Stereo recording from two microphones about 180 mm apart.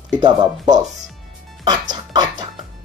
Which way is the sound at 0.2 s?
25° right (ahead or behind).